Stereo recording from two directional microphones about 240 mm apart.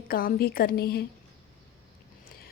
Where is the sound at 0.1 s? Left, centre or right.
Left.